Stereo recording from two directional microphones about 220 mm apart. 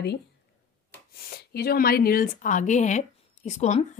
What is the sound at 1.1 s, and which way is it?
Speech, 45° left (ahead or behind).